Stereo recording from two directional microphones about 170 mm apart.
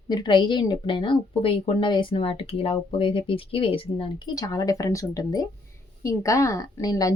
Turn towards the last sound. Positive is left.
turn(degrees=20)  # may be behind; listen again after turning